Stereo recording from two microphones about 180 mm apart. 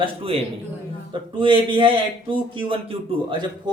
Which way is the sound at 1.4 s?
30° right (ahead or behind).